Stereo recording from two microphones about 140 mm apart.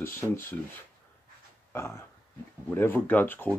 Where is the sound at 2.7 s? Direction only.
15° left (ahead or behind).